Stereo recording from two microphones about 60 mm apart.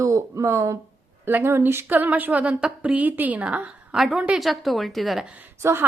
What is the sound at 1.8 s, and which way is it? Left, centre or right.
A woman's voice, right.